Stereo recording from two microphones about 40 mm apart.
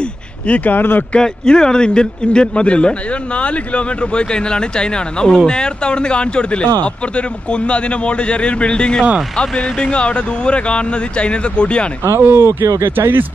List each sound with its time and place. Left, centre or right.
0.7 s speech: left
1.1 s a man's voice: centre
12.2 s speech: right